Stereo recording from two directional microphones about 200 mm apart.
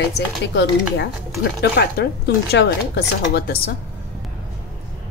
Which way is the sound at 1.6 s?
55° left (ahead or behind).